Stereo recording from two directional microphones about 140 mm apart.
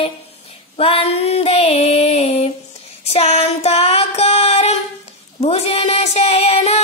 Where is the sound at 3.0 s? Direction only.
50° left (ahead or behind).